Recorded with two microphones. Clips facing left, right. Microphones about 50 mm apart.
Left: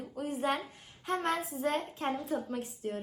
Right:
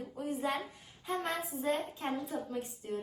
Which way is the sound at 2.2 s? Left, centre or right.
Left.